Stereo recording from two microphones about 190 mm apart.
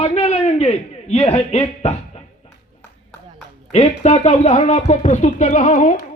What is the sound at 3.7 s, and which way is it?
Speech, 35° left (ahead or behind).